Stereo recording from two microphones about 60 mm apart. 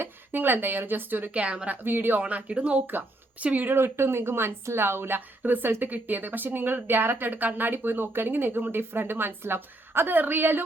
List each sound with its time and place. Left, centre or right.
0.0 s speech: right
2.2 s speech: right
3.4 s a woman's voice: right